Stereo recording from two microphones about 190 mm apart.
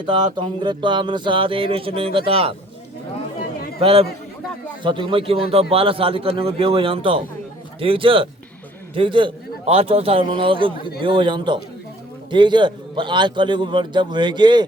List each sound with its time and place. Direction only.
0.0 s a man's voice: 25° right (ahead or behind)
3.8 s a man's voice: 30° right (ahead or behind)